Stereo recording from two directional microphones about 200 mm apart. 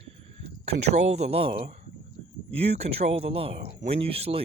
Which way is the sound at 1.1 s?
30° right (ahead or behind).